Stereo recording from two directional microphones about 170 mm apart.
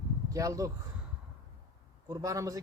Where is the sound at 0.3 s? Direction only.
20° right (ahead or behind).